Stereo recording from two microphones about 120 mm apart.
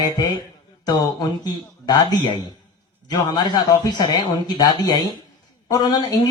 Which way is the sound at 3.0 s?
35° left (ahead or behind).